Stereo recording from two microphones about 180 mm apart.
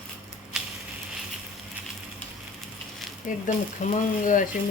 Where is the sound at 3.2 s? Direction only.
45° left (ahead or behind).